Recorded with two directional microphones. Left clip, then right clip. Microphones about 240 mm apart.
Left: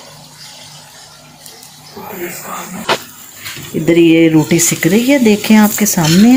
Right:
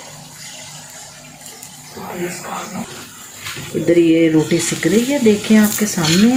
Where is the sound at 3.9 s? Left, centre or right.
Left.